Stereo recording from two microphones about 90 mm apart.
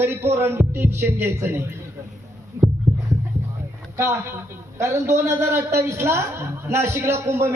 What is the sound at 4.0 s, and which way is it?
A man's voice, 30° right (ahead or behind).